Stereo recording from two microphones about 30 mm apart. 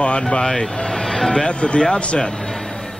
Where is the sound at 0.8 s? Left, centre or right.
Centre; by 2.2 s left.